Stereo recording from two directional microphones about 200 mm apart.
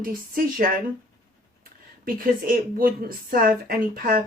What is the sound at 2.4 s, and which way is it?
Speech, 45° right (ahead or behind).